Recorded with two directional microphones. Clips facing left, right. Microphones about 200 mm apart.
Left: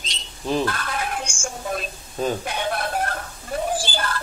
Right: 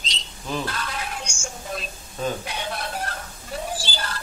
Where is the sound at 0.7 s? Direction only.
55° left (ahead or behind).